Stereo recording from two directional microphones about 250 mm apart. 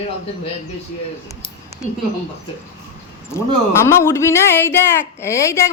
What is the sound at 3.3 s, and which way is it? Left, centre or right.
Speech, centre.